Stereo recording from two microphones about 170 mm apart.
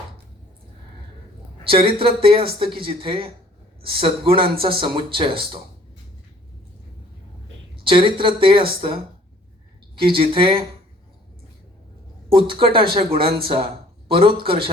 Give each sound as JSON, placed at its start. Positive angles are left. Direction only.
{"t": 1.6, "sound": "a woman's voice", "side_deg": -35}
{"t": 7.9, "sound": "a woman's voice", "side_deg": -30}
{"t": 12.3, "sound": "a woman's voice", "side_deg": -30}